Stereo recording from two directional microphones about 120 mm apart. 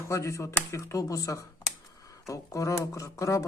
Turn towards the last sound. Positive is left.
turn(degrees=30)  # may be behind; listen again after turning